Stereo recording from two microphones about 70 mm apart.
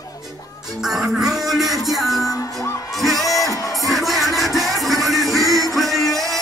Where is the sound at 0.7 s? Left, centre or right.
Centre.